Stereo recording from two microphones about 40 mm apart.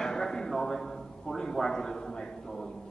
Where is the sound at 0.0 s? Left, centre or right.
Centre.